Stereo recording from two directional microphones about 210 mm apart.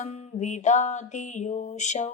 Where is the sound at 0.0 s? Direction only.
30° left (ahead or behind).